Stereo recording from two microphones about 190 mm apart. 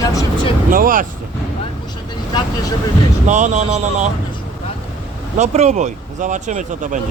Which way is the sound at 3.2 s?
40° right (ahead or behind).